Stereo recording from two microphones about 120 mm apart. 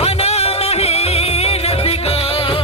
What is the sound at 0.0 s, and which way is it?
Music, 60° left (ahead or behind).